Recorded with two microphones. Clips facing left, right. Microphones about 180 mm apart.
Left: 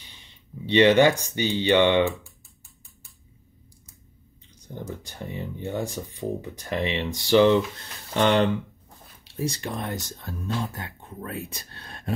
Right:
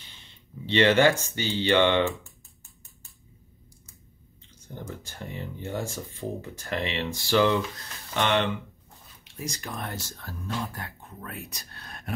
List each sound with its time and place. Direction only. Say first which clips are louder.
0.7 s speech: left 3 dB; 15° left (ahead or behind)
4.8 s speech: left 3 dB; 15° left (ahead or behind)